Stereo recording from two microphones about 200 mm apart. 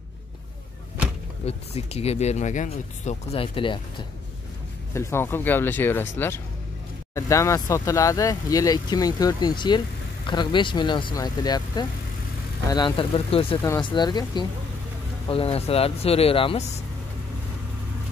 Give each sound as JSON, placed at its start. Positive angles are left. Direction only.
{"t": 1.4, "sound": "speech", "side_deg": 30}
{"t": 4.9, "sound": "speech", "side_deg": 10}